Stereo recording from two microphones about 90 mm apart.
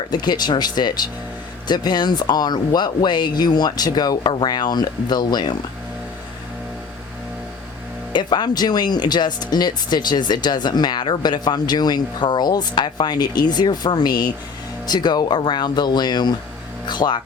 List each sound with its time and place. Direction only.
0.1 s speech: 50° left (ahead or behind)
8.1 s speech: 55° left (ahead or behind)